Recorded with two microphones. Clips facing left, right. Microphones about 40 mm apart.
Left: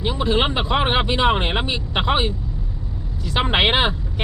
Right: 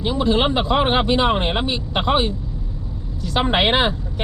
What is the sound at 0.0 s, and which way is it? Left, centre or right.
Speech, centre.